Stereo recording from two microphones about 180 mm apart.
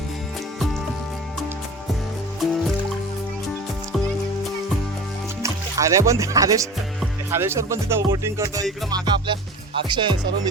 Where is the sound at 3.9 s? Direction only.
Centre (ahead or behind).